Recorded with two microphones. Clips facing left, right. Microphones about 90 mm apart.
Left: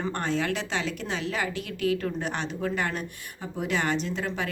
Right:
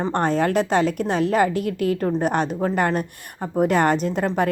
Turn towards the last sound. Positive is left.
turn(degrees=-50)  # may be behind; listen again after turning